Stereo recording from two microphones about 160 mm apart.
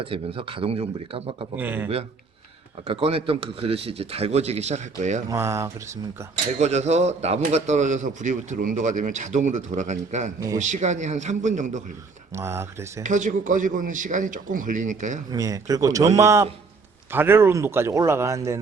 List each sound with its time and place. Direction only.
0.0 s speech: 35° right (ahead or behind)
1.5 s a man's voice: 10° right (ahead or behind)
2.8 s speech: 35° right (ahead or behind)
5.3 s a man's voice: 20° right (ahead or behind)
6.6 s a man's voice: 45° right (ahead or behind)
12.3 s a man's voice: 15° right (ahead or behind)
13.0 s a man's voice: 50° right (ahead or behind)
15.3 s a man's voice: 20° right (ahead or behind)